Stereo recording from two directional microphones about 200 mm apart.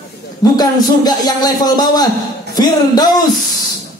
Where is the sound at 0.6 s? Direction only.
20° left (ahead or behind).